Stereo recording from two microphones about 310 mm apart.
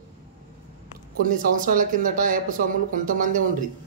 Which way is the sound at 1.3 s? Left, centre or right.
Right.